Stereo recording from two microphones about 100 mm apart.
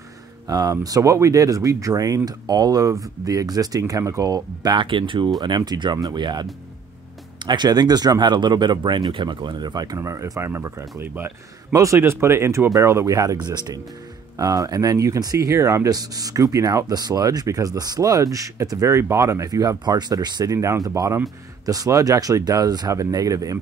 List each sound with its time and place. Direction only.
0.5 s speech: 35° right (ahead or behind)
4.7 s speech: 55° right (ahead or behind)
5.6 s speech: 45° right (ahead or behind)
9.9 s speech: 30° right (ahead or behind)
20.5 s speech: 30° right (ahead or behind)